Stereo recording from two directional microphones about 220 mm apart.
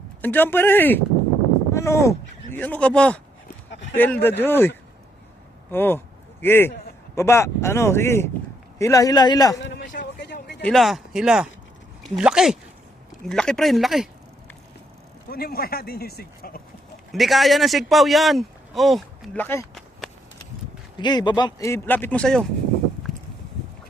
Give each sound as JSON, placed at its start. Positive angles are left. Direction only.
{"t": 0.2, "sound": "speech", "side_deg": 10}
{"t": 9.6, "sound": "a sound", "side_deg": 50}
{"t": 10.6, "sound": "speech", "side_deg": 0}
{"t": 15.3, "sound": "speech", "side_deg": 45}
{"t": 17.1, "sound": "speech", "side_deg": 0}
{"t": 21.0, "sound": "speech", "side_deg": 20}